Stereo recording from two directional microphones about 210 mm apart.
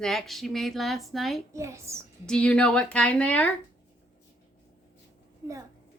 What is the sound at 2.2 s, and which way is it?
A woman's voice, 5° left (ahead or behind).